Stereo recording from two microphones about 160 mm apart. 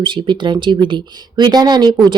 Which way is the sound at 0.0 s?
30° right (ahead or behind).